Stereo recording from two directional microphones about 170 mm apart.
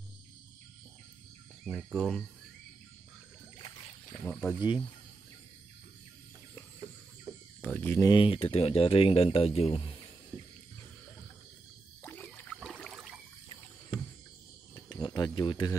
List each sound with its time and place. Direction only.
1.6 s cricket: 5° right (ahead or behind)
2.0 s speech: 5° left (ahead or behind)
4.3 s speech: 10° left (ahead or behind)
7.6 s speech: 10° left (ahead or behind)
8.1 s speech: 30° left (ahead or behind)
12.0 s rowboat: 10° left (ahead or behind)
12.5 s a sound: centre (ahead or behind)
13.5 s rowboat: 30° left (ahead or behind)
14.9 s a sound: 25° left (ahead or behind)